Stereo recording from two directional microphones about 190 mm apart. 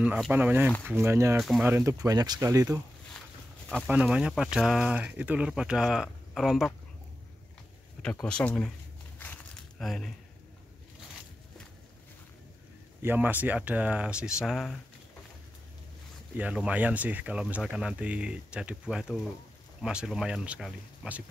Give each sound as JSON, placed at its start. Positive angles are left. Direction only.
{"t": 0.0, "sound": "speech", "side_deg": -5}
{"t": 1.4, "sound": "speech", "side_deg": 0}
{"t": 1.7, "sound": "speech", "side_deg": -15}
{"t": 3.6, "sound": "speech", "side_deg": 5}
{"t": 8.0, "sound": "speech", "side_deg": 5}
{"t": 9.2, "sound": "crumpling", "side_deg": 10}
{"t": 13.0, "sound": "speech", "side_deg": -10}
{"t": 16.3, "sound": "speech", "side_deg": -5}